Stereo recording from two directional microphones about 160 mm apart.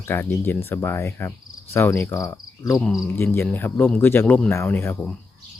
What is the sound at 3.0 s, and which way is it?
Speech, 15° left (ahead or behind).